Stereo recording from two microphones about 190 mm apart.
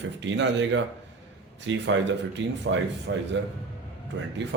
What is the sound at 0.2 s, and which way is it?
A man's voice, 70° right (ahead or behind).